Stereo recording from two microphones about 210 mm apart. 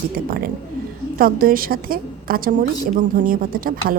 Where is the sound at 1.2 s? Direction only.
45° right (ahead or behind).